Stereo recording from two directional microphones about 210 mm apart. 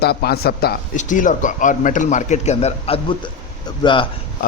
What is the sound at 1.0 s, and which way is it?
A man's voice, 35° left (ahead or behind).